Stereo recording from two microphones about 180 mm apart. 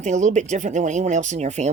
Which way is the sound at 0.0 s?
40° right (ahead or behind).